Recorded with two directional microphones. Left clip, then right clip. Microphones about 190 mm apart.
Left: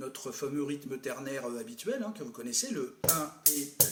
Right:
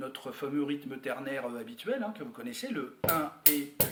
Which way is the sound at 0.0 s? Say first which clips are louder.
Even; 50° left (ahead or behind).